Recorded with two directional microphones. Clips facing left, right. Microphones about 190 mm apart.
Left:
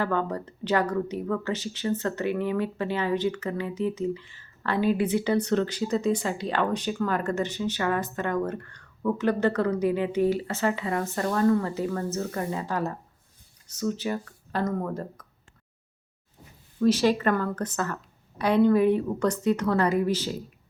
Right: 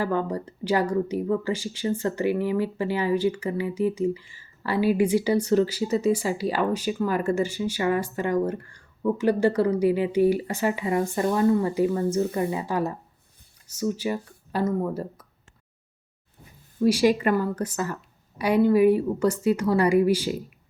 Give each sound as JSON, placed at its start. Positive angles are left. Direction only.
{"t": 0.0, "sound": "speech", "side_deg": -10}
{"t": 16.8, "sound": "speech", "side_deg": -10}